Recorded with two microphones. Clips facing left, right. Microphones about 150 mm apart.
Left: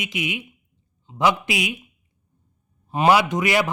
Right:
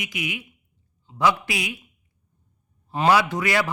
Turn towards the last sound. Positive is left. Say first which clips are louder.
# left 2 dB
turn(degrees=20)  # may be behind; listen again after turning